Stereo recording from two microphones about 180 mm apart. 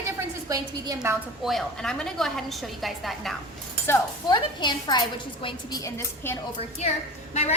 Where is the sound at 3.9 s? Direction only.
25° left (ahead or behind).